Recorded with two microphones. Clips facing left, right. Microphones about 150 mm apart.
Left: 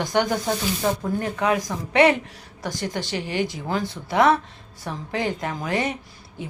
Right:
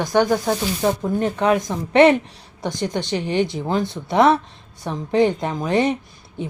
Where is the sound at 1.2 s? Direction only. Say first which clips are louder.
Right 4 dB; 25° right (ahead or behind).